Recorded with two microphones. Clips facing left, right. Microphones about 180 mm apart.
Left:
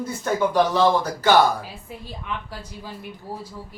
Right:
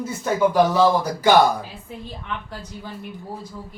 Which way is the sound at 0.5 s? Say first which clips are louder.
Right 1 dB; 10° right (ahead or behind).